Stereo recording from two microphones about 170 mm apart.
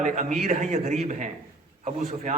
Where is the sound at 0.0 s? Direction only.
45° right (ahead or behind).